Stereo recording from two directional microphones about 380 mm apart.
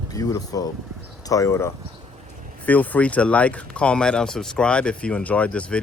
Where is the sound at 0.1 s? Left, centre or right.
Centre.